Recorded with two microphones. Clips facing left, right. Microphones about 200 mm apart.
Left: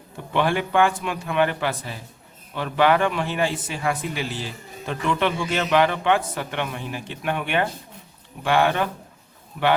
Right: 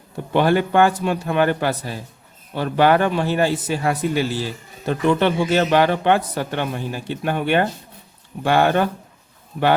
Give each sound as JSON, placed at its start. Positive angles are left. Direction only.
{"t": 0.3, "sound": "a man's voice", "side_deg": -40}